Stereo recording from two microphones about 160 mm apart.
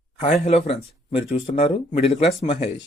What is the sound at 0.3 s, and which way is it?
Speech, 40° left (ahead or behind).